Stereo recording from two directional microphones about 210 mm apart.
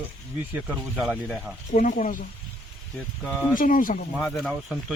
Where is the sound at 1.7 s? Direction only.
40° left (ahead or behind).